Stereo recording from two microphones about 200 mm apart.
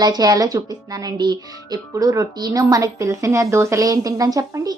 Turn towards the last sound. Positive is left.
turn(degrees=-15)  # may be behind; listen again after turning